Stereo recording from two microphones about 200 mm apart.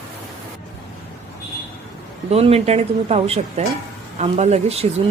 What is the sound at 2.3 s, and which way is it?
Speech, 30° right (ahead or behind).